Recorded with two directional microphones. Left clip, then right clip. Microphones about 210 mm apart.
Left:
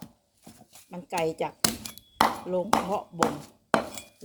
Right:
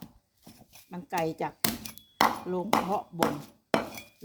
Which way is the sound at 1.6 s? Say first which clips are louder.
Left 3 dB; centre (ahead or behind).